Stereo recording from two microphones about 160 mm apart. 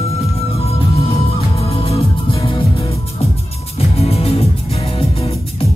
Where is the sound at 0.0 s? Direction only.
40° left (ahead or behind).